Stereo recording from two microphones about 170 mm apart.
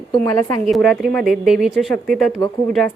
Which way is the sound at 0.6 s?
Centre (ahead or behind).